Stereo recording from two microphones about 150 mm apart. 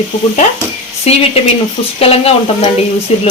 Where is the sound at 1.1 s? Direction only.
45° left (ahead or behind).